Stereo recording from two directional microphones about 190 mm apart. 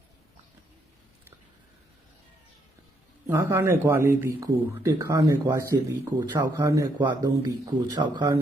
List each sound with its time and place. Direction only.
3.2 s speech: 15° right (ahead or behind)